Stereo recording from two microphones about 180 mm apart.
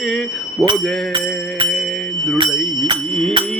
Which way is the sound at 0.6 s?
30° right (ahead or behind).